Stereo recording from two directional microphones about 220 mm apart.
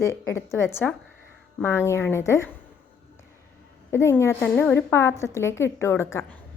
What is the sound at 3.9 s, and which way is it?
A woman's voice, 10° left (ahead or behind).